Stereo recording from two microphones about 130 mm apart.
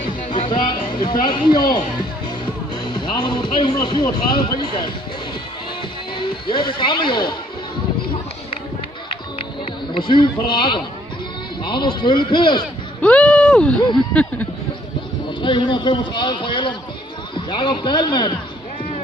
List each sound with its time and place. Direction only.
0.4 s music: 35° left (ahead or behind)
1.2 s a man's voice: 35° left (ahead or behind)
2.8 s a man's voice: 35° left (ahead or behind)
6.5 s a man's voice: 35° left (ahead or behind)
9.9 s a man's voice: 40° left (ahead or behind)
13.0 s speech: 10° left (ahead or behind)
15.4 s a man's voice: 35° left (ahead or behind)